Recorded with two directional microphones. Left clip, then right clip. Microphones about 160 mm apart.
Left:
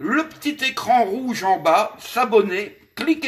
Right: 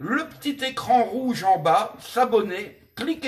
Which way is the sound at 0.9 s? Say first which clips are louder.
Left 2 dB; 25° left (ahead or behind).